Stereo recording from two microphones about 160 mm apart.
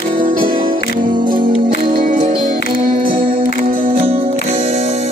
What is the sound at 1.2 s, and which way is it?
Music, 30° right (ahead or behind).